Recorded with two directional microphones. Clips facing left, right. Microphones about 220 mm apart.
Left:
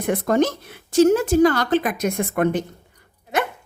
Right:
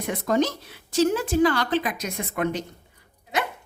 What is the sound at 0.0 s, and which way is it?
Speech, 55° left (ahead or behind).